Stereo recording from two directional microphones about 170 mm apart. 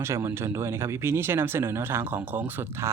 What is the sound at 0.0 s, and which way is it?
Speech, 15° right (ahead or behind).